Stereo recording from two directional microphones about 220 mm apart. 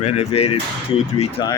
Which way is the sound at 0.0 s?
30° left (ahead or behind).